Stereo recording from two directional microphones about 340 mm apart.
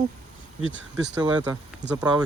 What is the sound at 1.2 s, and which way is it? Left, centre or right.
Speech, centre.